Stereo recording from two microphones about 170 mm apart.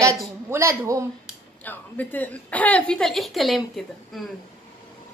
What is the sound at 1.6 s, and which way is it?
A woman's voice, 10° left (ahead or behind).